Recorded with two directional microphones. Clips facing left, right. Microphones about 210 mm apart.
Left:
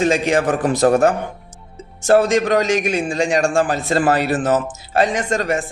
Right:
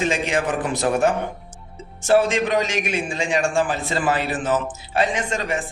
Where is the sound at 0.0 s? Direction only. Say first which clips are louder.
Left 6 dB; 40° left (ahead or behind).